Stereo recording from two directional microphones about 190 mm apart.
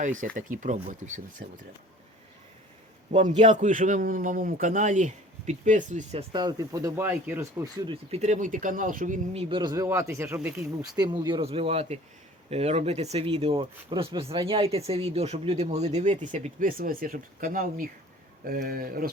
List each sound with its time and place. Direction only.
0.0 s a man's voice: 40° right (ahead or behind)
3.1 s a man's voice: 40° right (ahead or behind)
6.3 s speech: 20° right (ahead or behind)
7.9 s a man's voice: 35° right (ahead or behind); by 19.1 s 50° right (ahead or behind)